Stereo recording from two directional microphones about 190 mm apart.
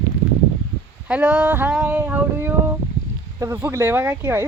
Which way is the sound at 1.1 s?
5° right (ahead or behind).